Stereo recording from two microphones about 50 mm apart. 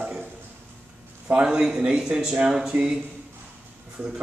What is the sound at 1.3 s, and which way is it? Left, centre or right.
A man's voice, centre.